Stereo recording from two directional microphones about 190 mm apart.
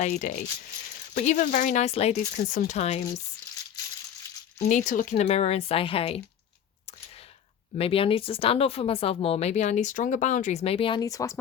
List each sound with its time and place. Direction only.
0.0 s a woman's voice: 40° left (ahead or behind)
4.5 s a woman's voice: 40° left (ahead or behind)
7.8 s a woman's voice: 30° left (ahead or behind)